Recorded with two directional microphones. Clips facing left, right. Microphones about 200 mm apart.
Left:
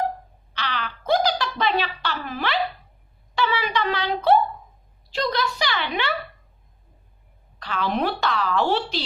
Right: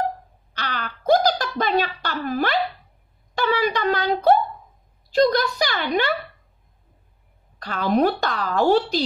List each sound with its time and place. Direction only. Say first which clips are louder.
0.6 s a sound: even; 45° right (ahead or behind)
3.3 s a woman's voice: right 2 dB; 45° right (ahead or behind)
7.5 s a woman's voice: right 5 dB; 45° right (ahead or behind)